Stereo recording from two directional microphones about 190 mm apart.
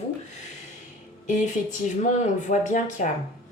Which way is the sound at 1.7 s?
40° left (ahead or behind).